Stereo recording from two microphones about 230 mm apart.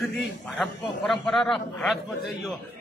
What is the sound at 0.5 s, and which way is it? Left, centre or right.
A man's voice, centre.